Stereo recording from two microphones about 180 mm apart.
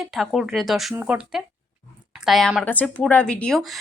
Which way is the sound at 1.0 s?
10° right (ahead or behind).